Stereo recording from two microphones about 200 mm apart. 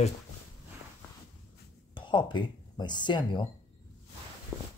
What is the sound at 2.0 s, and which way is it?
Speech, 25° left (ahead or behind).